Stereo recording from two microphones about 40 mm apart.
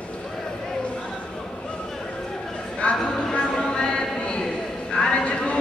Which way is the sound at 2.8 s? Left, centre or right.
Left.